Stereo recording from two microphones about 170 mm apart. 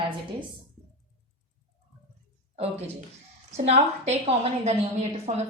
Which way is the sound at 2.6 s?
40° right (ahead or behind).